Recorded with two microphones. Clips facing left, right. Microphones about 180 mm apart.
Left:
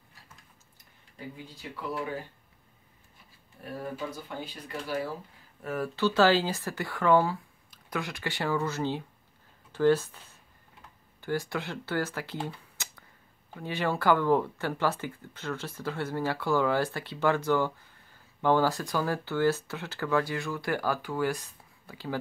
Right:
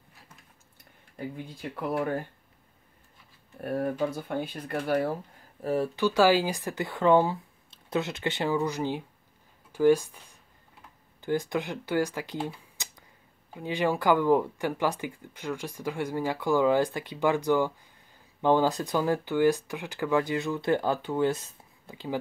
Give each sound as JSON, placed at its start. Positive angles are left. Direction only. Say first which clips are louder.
{"t": 1.1, "sound": "speech", "louder": "right 6 dB", "side_deg": -55}
{"t": 4.0, "sound": "speech", "louder": "right 7 dB", "side_deg": -55}
{"t": 5.6, "sound": "speech", "louder": "right 5 dB", "side_deg": -30}
{"t": 5.9, "sound": "speech", "louder": "even", "side_deg": -10}
{"t": 11.1, "sound": "speech", "louder": "right 3 dB", "side_deg": -20}